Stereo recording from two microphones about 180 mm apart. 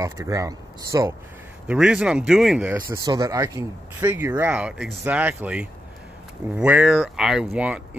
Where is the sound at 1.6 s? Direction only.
5° right (ahead or behind).